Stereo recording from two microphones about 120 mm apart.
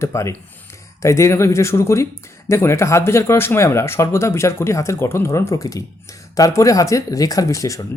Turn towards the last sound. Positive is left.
turn(degrees=30)  # may be behind; listen again after turning